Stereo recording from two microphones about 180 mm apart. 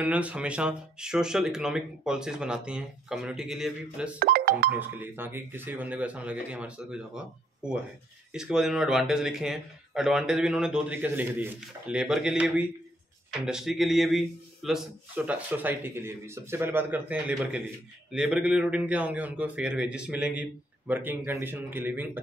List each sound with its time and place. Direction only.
0.0 s speech: 10° right (ahead or behind)
4.2 s speech: 55° right (ahead or behind)
4.7 s a man's voice: 10° right (ahead or behind)
8.3 s a man's voice: 5° right (ahead or behind)